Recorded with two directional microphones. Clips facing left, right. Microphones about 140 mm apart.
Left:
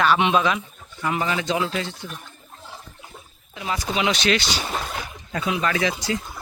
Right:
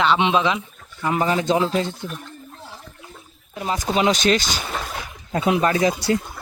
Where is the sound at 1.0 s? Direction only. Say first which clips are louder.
Right 4 dB; 35° right (ahead or behind).